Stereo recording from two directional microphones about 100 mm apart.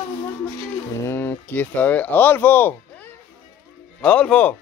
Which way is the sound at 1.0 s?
20° left (ahead or behind).